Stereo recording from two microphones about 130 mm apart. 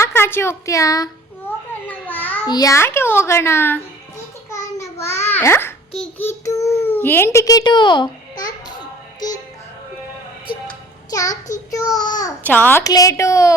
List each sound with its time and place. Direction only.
0.0 s a woman's voice: 15° left (ahead or behind)
1.9 s a sound: 15° left (ahead or behind)
2.5 s a child's voice: 25° left (ahead or behind)
4.5 s babbling: 20° left (ahead or behind)
6.0 s a child's voice: 15° left (ahead or behind); by 8.4 s 35° left (ahead or behind)
11.1 s a child's voice: 25° left (ahead or behind)
12.5 s a child's voice: 15° left (ahead or behind)
12.8 s a child's voice: 25° left (ahead or behind)